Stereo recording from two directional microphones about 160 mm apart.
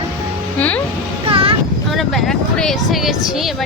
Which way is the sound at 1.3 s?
35° right (ahead or behind).